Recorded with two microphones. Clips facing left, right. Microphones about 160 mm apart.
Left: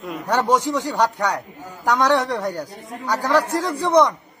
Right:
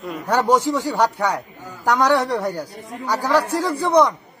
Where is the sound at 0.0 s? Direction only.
Centre (ahead or behind).